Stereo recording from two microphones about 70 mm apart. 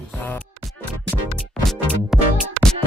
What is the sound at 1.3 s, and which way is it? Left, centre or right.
Music, centre.